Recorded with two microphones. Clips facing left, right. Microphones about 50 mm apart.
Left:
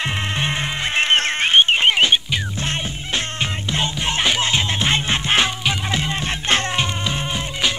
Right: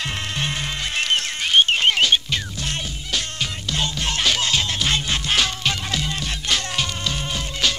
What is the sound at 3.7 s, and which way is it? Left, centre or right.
Music, left.